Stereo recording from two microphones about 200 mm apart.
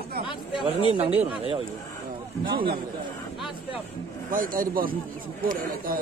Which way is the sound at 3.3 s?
Centre (ahead or behind).